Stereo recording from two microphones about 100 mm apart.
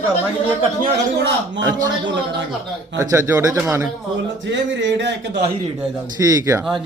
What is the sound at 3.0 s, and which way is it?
Speech, 30° right (ahead or behind).